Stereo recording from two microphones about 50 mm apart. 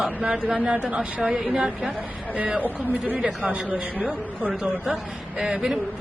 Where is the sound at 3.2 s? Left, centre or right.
Right.